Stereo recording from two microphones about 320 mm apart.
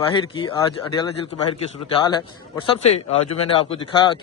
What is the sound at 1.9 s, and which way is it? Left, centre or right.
A man's voice, centre.